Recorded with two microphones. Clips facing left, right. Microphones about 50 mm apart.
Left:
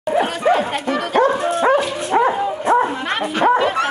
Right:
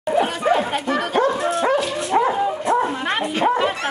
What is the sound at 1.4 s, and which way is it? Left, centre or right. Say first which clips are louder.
Dog: left 3 dB; left.